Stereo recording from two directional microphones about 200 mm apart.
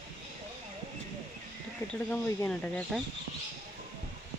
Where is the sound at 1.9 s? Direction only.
10° left (ahead or behind).